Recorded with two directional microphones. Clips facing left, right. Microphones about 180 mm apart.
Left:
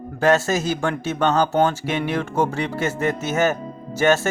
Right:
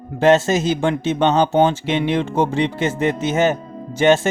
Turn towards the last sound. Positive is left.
turn(degrees=-20)  # may be behind; listen again after turning